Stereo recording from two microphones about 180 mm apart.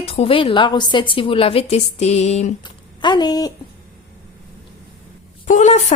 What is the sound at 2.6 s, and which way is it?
Speech, 25° left (ahead or behind).